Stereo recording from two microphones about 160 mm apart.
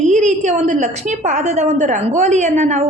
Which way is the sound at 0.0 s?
45° right (ahead or behind).